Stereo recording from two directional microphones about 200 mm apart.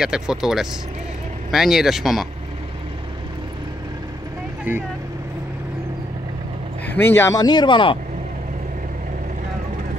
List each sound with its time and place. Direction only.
0.0 s speech: 5° right (ahead or behind)
4.7 s speech: 10° right (ahead or behind)
6.9 s speech: 10° left (ahead or behind)